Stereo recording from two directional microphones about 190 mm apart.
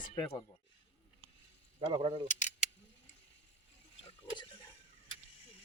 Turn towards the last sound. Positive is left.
turn(degrees=25)  # may be behind; listen again after turning